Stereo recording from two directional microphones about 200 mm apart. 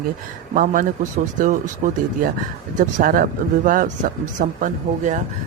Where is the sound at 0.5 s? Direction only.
40° right (ahead or behind).